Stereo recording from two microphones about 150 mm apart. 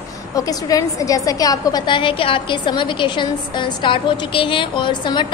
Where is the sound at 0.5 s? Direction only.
25° left (ahead or behind).